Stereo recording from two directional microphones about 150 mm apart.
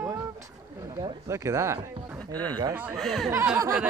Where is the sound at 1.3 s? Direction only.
20° right (ahead or behind).